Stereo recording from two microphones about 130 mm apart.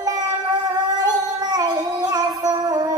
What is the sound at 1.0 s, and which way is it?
Music, 30° right (ahead or behind).